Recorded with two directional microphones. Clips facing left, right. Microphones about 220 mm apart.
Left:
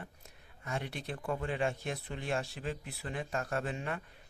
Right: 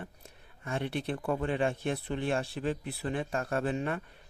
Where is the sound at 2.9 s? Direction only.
30° right (ahead or behind).